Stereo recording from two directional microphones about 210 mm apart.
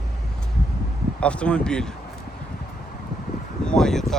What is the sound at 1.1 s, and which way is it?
Speech, 5° left (ahead or behind).